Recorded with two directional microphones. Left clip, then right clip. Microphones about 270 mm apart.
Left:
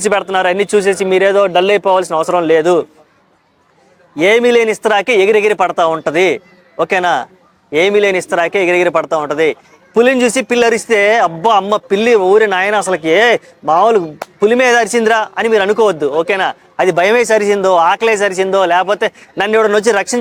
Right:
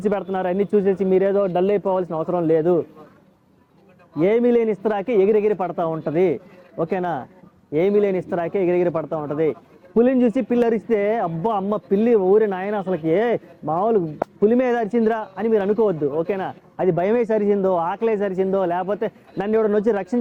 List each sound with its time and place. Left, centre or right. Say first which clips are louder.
0.0 s speech: left 10 dB; centre
4.2 s speech: left 8 dB; centre